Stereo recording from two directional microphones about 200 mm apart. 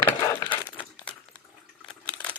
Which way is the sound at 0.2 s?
15° left (ahead or behind).